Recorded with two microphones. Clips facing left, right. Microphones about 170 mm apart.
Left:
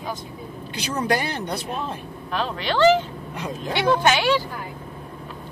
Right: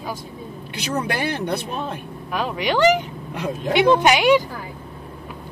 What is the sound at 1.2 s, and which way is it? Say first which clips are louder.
Speech: right 4 dB; 60° right (ahead or behind).